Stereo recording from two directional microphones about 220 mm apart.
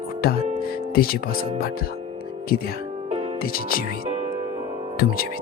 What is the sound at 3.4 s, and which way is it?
Speech, 40° left (ahead or behind).